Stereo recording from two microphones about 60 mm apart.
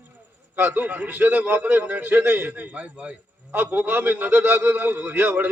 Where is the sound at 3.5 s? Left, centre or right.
Right.